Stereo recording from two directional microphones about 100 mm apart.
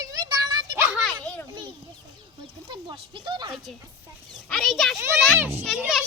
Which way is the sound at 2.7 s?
55° right (ahead or behind).